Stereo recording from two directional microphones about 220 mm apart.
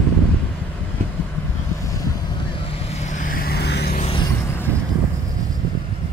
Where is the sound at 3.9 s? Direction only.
30° left (ahead or behind).